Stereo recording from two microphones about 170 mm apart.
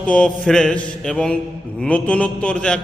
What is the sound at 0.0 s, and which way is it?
Mantra, 5° left (ahead or behind).